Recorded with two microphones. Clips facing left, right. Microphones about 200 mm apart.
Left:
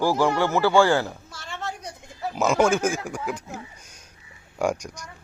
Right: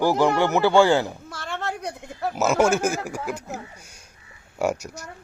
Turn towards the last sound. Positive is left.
turn(degrees=-5)  # may be behind; listen again after turning